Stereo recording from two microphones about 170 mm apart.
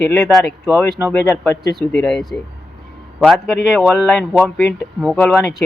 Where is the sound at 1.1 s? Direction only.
15° left (ahead or behind).